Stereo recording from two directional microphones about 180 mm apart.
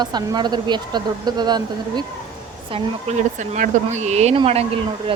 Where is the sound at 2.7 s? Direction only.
40° right (ahead or behind).